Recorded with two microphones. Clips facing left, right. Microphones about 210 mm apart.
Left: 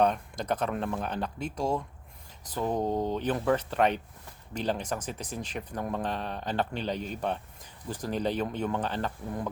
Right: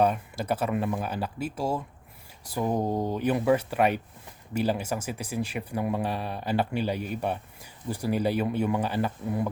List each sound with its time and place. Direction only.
0.0 s speech: 5° right (ahead or behind)